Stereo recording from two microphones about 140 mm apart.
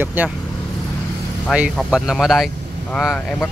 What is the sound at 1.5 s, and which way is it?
Speech, 5° right (ahead or behind).